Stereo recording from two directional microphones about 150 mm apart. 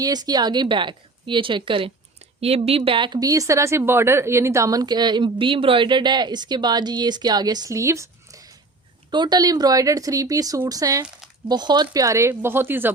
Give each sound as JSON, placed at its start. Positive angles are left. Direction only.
{"t": 0.0, "sound": "a woman's voice", "side_deg": -25}